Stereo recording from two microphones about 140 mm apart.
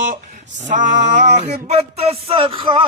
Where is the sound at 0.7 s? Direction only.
60° right (ahead or behind).